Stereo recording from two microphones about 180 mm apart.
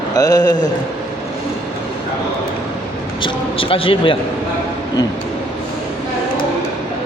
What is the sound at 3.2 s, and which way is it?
Speech, 30° left (ahead or behind).